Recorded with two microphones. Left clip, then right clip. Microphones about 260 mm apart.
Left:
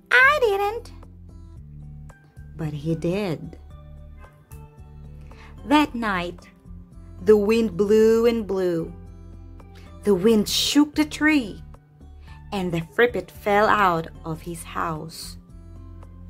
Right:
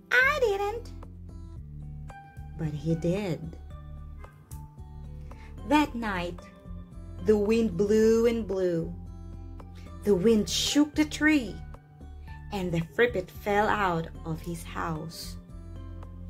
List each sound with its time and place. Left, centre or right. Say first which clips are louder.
0.1 s music: left 7 dB; centre
2.5 s speech: left 4 dB; centre
5.7 s speech: left 5 dB; left
10.0 s speech: left 5 dB; left